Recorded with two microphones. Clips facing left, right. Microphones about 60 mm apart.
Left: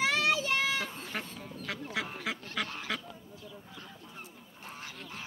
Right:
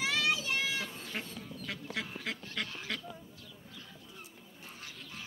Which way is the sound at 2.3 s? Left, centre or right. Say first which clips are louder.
Left 3 dB; centre.